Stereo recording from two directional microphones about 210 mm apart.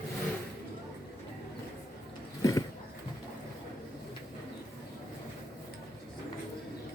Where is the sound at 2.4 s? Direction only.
15° left (ahead or behind).